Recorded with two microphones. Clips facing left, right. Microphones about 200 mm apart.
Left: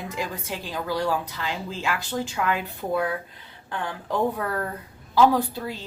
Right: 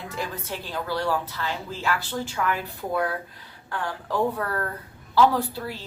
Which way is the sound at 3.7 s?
20° left (ahead or behind).